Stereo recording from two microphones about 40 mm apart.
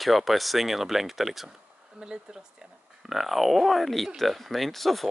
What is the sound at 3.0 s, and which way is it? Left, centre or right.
Speech, centre.